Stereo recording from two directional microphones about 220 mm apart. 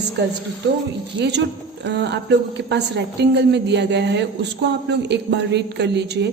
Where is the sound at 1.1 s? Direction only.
50° right (ahead or behind).